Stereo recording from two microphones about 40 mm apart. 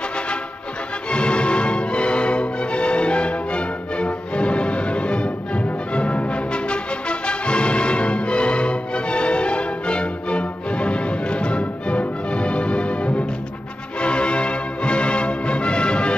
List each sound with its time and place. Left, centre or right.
1.1 s music: left